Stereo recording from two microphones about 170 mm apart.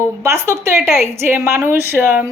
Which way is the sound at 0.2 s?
15° right (ahead or behind).